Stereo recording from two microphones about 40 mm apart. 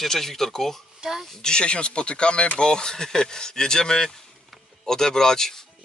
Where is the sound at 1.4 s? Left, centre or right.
Left.